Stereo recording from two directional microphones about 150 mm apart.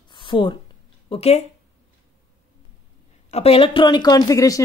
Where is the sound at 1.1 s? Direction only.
45° left (ahead or behind).